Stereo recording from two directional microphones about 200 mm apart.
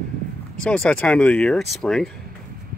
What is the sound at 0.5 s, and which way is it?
Speech, 5° left (ahead or behind).